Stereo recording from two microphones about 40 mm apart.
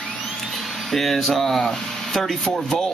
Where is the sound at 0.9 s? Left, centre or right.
Centre.